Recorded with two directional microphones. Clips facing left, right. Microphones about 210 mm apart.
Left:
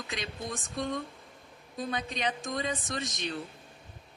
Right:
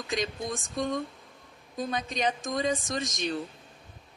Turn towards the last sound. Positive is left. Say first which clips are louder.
# right 3 dB
turn(degrees=-45)  # may be behind; listen again after turning